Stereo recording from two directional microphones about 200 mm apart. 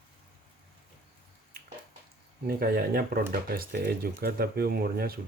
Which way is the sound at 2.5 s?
45° right (ahead or behind).